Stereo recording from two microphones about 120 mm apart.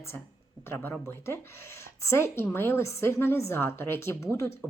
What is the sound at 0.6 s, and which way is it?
Speech, 20° left (ahead or behind).